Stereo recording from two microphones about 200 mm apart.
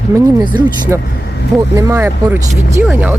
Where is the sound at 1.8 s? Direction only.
15° right (ahead or behind).